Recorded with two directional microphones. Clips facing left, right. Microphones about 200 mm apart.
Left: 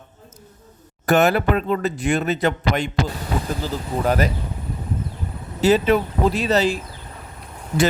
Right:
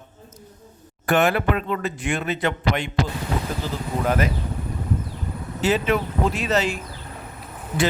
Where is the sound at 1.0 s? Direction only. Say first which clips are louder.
Left 3 dB; 40° left (ahead or behind).